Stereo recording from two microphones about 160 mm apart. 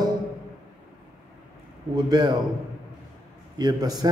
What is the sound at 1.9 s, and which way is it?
Speech, 25° right (ahead or behind).